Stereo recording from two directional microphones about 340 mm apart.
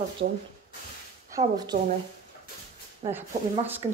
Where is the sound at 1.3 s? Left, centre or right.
Centre.